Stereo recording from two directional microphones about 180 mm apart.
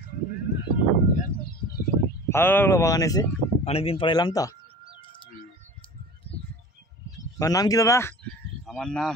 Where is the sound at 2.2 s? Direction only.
10° left (ahead or behind).